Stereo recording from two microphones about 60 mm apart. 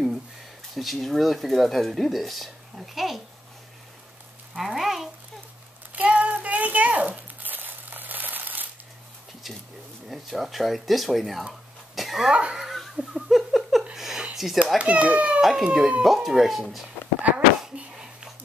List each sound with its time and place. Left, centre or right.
0.7 s speech: centre
4.6 s speech: centre
6.0 s crumpling: right
10.0 s speech: centre
11.9 s cough: centre
12.3 s speech: centre
12.9 s laughter: centre
13.9 s a sound: centre
14.8 s a child's voice: right
15.4 s speech: centre
17.7 s a sound: centre